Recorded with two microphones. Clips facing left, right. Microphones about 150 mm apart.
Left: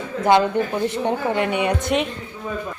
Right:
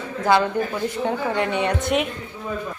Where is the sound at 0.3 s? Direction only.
20° left (ahead or behind).